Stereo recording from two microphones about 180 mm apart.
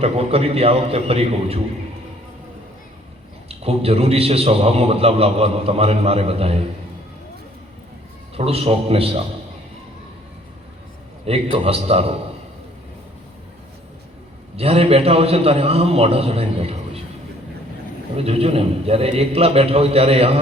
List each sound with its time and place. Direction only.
0.0 s a man's voice: 35° right (ahead or behind)
3.5 s a man's voice: 35° right (ahead or behind)
8.4 s a man's voice: 35° right (ahead or behind)
11.5 s a man's voice: 35° right (ahead or behind)
14.5 s a man's voice: 35° right (ahead or behind)
18.2 s a man's voice: 35° right (ahead or behind)